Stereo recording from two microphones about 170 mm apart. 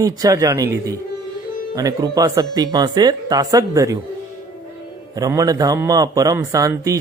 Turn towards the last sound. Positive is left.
turn(degrees=-20)  # may be behind; listen again after turning